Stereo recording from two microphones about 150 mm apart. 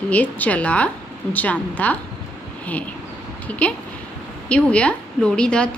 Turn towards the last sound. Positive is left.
turn(degrees=5)  # may be behind; listen again after turning